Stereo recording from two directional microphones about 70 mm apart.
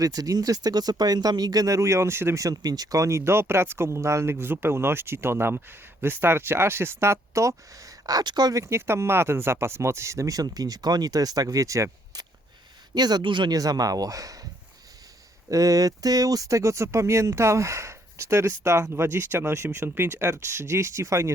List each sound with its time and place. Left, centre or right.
0.0 s speech: right
2.4 s speech: right
8.5 s speech: right
12.1 s a sound: right
12.9 s speech: right
15.4 s speech: right